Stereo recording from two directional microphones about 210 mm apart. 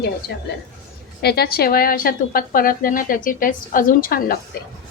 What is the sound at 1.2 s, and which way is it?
A woman's voice, 50° left (ahead or behind).